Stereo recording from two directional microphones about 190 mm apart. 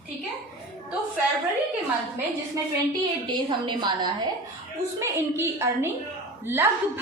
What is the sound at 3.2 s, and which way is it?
A woman's voice, 25° right (ahead or behind).